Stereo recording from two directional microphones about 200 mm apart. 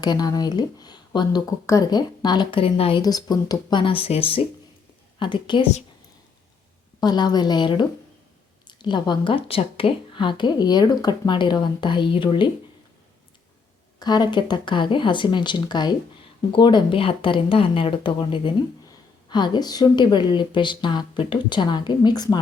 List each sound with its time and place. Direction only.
0.0 s speech: 20° left (ahead or behind)
7.0 s speech: 20° left (ahead or behind)
14.0 s speech: 20° left (ahead or behind)